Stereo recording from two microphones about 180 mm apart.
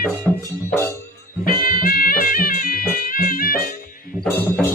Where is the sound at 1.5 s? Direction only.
50° left (ahead or behind).